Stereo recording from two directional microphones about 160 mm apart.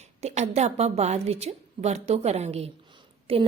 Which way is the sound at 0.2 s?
45° right (ahead or behind).